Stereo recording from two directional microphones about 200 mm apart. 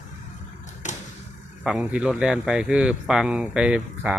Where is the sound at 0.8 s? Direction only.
40° left (ahead or behind).